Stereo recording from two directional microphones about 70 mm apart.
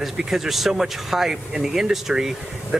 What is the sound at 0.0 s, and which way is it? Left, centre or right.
Speech, centre.